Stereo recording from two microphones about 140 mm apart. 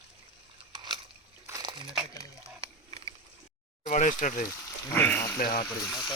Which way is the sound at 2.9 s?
45° right (ahead or behind).